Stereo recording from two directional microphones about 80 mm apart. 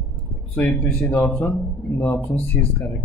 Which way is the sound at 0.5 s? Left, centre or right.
Left.